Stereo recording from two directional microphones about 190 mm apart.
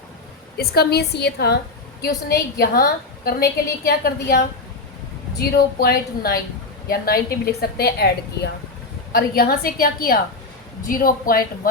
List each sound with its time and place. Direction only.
0.5 s a woman's voice: 55° left (ahead or behind)
5.4 s a woman's voice: 55° left (ahead or behind)